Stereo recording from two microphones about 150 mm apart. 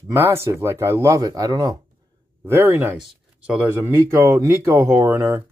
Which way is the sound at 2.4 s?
15° right (ahead or behind).